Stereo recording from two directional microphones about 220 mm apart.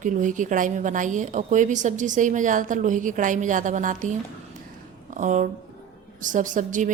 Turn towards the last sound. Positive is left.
turn(degrees=-35)  # may be behind; listen again after turning